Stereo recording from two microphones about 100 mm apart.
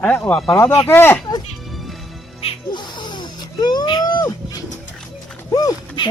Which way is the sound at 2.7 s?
50° left (ahead or behind).